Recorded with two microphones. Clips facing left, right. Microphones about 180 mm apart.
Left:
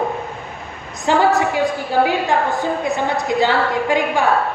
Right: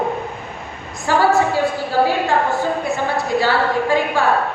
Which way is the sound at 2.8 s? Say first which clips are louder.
Left 1 dB; 20° left (ahead or behind).